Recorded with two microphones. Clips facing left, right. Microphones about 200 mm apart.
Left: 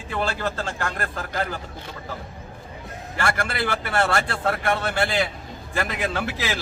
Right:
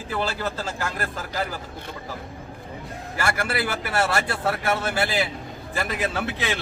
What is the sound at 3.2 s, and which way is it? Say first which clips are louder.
A man's voice: even; 5° right (ahead or behind).